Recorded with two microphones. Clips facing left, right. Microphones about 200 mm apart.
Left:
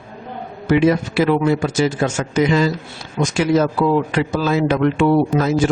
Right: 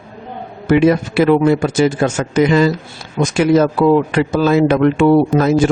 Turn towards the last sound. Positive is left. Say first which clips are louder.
# right 4 dB
turn(degrees=-55)  # may be behind; listen again after turning